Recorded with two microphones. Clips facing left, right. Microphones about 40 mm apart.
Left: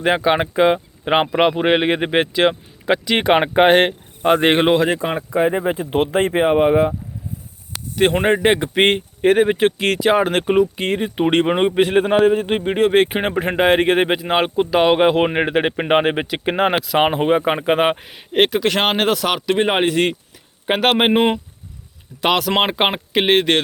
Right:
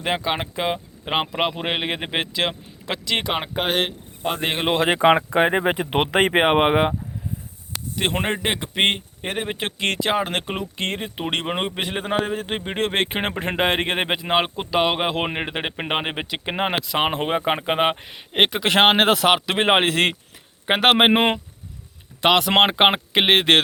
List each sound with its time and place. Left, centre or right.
0.0 s speech: centre
3.2 s speech: left
5.0 s speech: right
7.9 s speech: centre
18.6 s a man's voice: right